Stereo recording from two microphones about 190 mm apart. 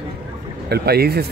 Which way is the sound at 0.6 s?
55° right (ahead or behind).